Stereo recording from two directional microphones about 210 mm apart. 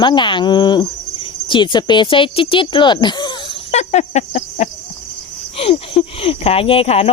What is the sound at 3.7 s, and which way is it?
Cricket, 35° left (ahead or behind).